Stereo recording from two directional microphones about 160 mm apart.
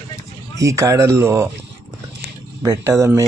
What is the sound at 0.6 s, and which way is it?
Speech, 20° right (ahead or behind).